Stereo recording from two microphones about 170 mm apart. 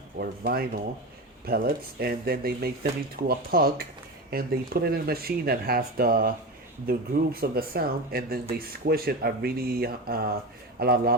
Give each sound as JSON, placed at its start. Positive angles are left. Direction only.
{"t": 0.2, "sound": "speech", "side_deg": -60}